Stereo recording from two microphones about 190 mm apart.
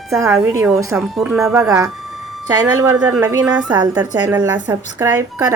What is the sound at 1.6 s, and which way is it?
A woman's voice, 15° right (ahead or behind).